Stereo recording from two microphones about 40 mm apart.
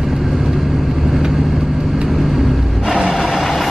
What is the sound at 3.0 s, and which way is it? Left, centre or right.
Vehicle, centre.